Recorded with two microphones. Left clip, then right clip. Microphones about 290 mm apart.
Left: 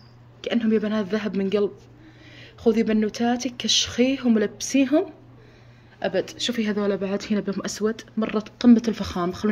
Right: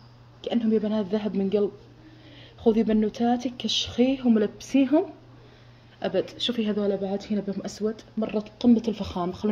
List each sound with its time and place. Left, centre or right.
0.5 s speech: left
0.9 s speech: centre
2.6 s speech: centre